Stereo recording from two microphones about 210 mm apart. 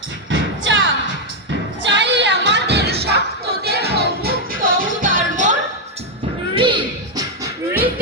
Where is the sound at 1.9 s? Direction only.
55° right (ahead or behind).